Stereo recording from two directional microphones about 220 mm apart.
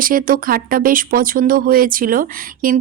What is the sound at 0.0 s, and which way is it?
Speech, 40° right (ahead or behind).